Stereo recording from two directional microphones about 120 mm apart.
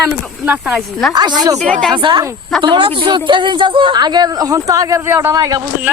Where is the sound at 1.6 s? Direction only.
5° left (ahead or behind).